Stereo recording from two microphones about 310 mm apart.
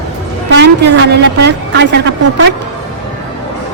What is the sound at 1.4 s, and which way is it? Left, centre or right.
A woman's voice, right.